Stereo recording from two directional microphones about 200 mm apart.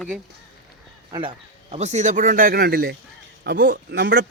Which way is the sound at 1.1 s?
25° right (ahead or behind).